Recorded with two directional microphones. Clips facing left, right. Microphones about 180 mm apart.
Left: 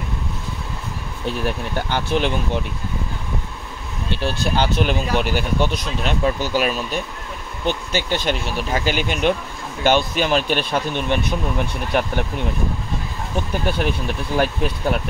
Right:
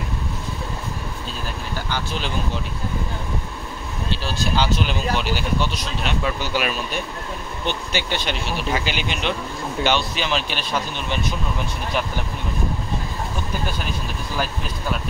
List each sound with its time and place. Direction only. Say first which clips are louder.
1.2 s speech: left 7 dB; 60° left (ahead or behind)
4.1 s speech: left 3 dB; 60° left (ahead or behind)
6.2 s speech: left 6 dB; 40° left (ahead or behind); by 12.1 s 60° left (ahead or behind)
13.7 s speech: left 7 dB; 65° left (ahead or behind)